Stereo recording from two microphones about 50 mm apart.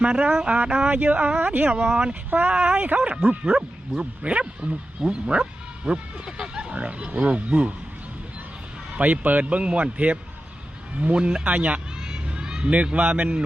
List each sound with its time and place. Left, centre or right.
0.0 s speech: right
0.5 s speech: right
9.0 s speech: right
12.0 s crowd: centre
12.7 s speech: right